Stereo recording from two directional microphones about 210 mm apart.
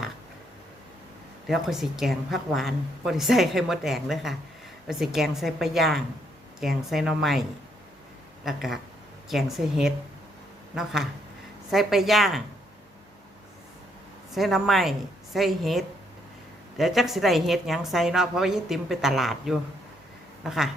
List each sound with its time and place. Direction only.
1.5 s a woman's voice: centre (ahead or behind)
8.4 s a woman's voice: centre (ahead or behind)
14.3 s a woman's voice: centre (ahead or behind)